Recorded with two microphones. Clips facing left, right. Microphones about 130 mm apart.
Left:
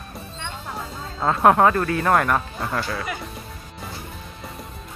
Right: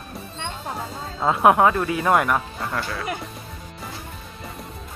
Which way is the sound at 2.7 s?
Centre (ahead or behind).